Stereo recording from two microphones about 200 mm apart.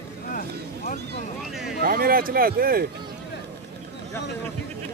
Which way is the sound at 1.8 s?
45° right (ahead or behind).